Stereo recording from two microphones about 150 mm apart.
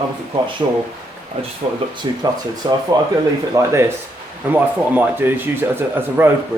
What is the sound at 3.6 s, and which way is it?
Speech, 20° right (ahead or behind).